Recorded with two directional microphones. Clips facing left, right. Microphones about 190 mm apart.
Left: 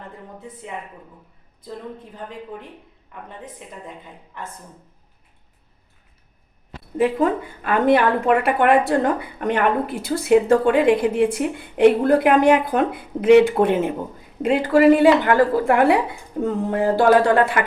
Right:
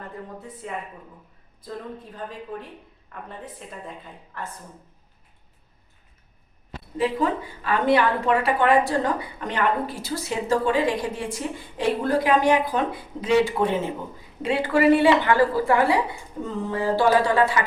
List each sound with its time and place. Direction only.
0.6 s speech: 20° left (ahead or behind)
2.1 s a woman's voice: 15° left (ahead or behind)
6.9 s a woman's voice: 50° left (ahead or behind)
14.4 s a woman's voice: 45° left (ahead or behind)